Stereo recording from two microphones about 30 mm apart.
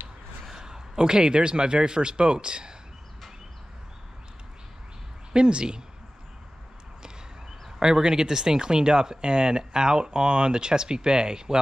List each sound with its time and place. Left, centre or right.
0.5 s a man's voice: centre
5.3 s speech: right
7.8 s speech: right